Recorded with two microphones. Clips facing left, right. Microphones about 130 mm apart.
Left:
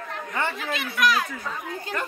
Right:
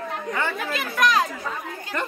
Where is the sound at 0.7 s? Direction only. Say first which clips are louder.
Right 2 dB; 40° right (ahead or behind).